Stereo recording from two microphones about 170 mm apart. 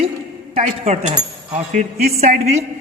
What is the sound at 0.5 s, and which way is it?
A man's voice, 40° right (ahead or behind).